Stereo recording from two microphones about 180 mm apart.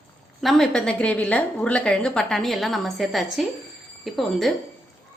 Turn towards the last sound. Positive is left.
turn(degrees=0)  # may be behind; listen again after turning